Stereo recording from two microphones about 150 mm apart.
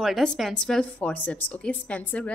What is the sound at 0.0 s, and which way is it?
A woman's voice, centre (ahead or behind).